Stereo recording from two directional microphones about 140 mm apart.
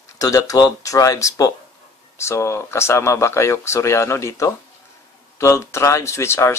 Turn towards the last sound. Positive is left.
turn(degrees=20)  # may be behind; listen again after turning